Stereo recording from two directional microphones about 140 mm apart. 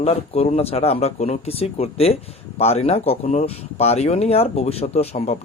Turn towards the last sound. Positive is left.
turn(degrees=50)  # may be behind; listen again after turning